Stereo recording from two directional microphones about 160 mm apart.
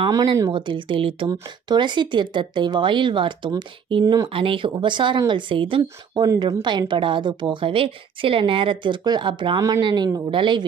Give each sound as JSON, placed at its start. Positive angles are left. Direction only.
{"t": 0.0, "sound": "speech", "side_deg": -30}